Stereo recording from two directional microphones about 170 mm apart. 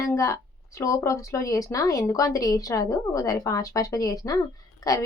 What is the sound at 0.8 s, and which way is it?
Speech, 20° left (ahead or behind).